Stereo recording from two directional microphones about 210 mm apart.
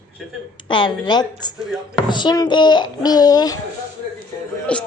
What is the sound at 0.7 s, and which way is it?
A man's voice, 20° left (ahead or behind).